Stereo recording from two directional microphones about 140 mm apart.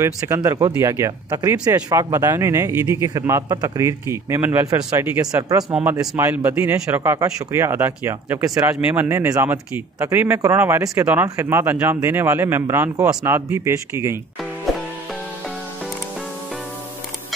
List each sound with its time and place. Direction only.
0.0 s a man's voice: 20° right (ahead or behind)